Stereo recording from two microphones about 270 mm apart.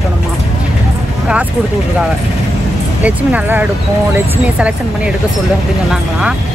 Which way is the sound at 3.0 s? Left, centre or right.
Centre.